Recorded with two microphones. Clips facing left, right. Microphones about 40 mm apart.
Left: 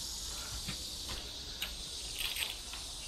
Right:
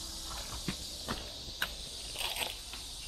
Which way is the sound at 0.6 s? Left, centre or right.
Centre.